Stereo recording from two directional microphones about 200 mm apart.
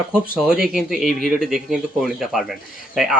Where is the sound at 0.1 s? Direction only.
5° right (ahead or behind).